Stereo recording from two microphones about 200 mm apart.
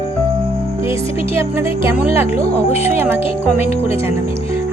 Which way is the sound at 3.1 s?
30° left (ahead or behind).